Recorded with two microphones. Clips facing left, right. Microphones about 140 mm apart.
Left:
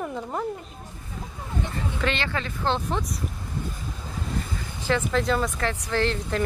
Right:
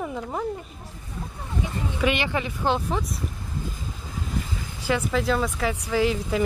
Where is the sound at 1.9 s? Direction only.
10° right (ahead or behind).